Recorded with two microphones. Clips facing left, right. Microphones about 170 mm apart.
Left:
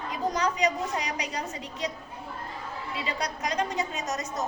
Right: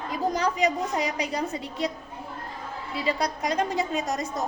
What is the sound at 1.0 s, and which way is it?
Speech, 30° right (ahead or behind).